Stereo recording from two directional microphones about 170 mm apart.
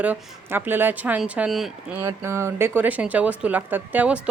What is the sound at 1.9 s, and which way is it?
Speech, 15° right (ahead or behind).